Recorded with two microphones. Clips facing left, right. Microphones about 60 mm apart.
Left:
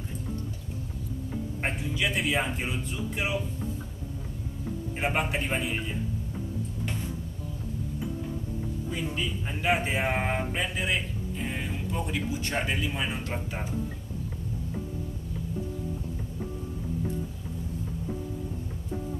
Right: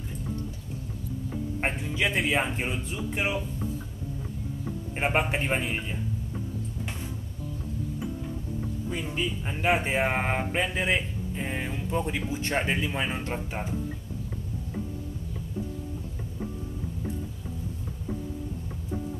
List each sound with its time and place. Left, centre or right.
1.6 s speech: right
4.9 s speech: right
8.9 s speech: centre